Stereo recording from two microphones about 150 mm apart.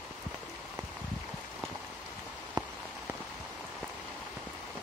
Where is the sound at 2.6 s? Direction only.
30° right (ahead or behind).